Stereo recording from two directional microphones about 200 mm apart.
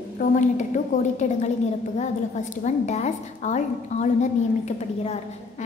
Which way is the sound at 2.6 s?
35° left (ahead or behind).